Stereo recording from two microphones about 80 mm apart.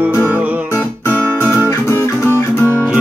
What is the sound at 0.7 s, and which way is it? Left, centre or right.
Guitar, left.